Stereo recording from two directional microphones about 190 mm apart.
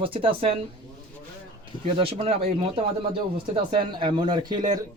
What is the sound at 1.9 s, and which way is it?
Speech, 30° right (ahead or behind).